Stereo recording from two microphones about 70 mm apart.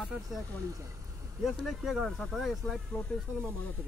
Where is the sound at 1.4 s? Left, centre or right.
Centre.